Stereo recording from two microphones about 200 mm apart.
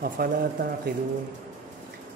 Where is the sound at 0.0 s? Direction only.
45° right (ahead or behind).